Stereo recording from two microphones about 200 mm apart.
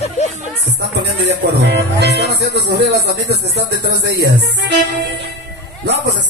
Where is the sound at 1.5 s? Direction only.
60° right (ahead or behind).